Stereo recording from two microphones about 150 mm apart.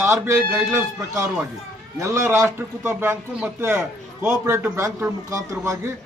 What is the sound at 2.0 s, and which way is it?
A man's voice, 20° right (ahead or behind).